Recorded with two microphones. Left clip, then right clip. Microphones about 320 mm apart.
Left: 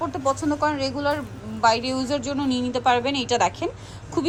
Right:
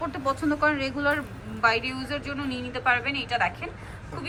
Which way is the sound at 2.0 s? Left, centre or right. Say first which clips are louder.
Left 6 dB; left.